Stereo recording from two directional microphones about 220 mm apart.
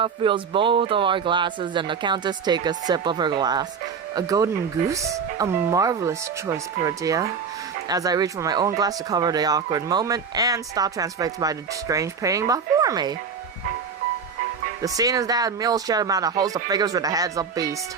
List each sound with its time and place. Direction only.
0.0 s speech: 20° right (ahead or behind)
14.8 s speech: 15° right (ahead or behind)